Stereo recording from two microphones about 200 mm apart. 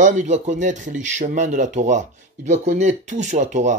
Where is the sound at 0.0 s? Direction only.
40° right (ahead or behind).